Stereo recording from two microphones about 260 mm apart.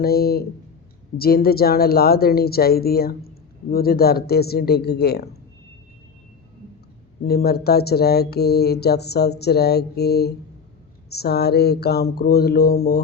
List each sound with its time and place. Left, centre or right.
0.0 s a woman's voice: left
7.3 s a woman's voice: left